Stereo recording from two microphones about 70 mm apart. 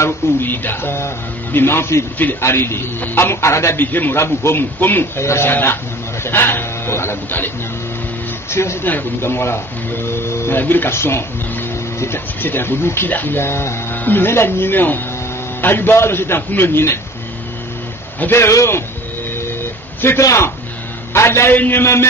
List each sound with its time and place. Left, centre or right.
0.0 s speech: left
3.8 s speech: left
4.2 s speech: left
8.5 s speech: left
8.8 s speech: left
18.3 s speech: left
20.0 s a man's voice: left